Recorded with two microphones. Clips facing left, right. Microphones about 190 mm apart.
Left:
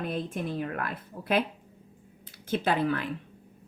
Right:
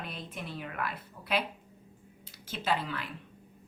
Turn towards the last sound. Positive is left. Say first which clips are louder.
# left 6 dB
turn(degrees=55)  # may be behind; listen again after turning